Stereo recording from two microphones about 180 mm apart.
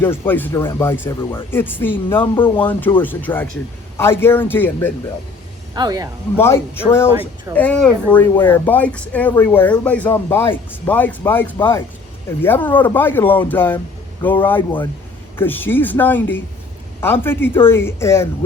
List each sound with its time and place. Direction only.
0.0 s a man's voice: 10° left (ahead or behind)
5.7 s speech: 20° right (ahead or behind)
6.3 s a man's voice: 15° left (ahead or behind)